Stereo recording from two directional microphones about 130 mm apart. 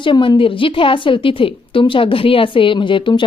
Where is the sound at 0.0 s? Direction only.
40° left (ahead or behind).